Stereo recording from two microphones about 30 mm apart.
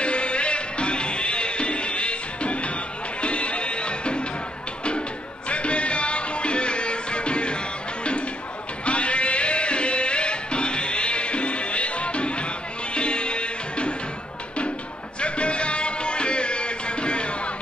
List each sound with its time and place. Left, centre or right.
0.0 s music: left
5.5 s music: left
8.8 s music: left
15.1 s music: left